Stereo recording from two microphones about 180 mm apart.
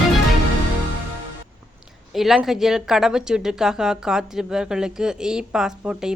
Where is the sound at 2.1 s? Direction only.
Centre (ahead or behind).